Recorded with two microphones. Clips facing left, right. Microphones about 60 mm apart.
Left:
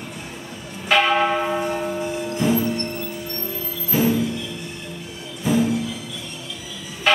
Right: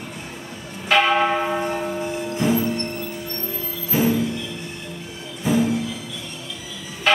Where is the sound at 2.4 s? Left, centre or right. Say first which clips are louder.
Even; right.